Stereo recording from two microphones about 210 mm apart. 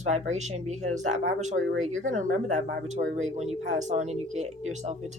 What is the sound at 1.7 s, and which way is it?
Speech, 70° right (ahead or behind).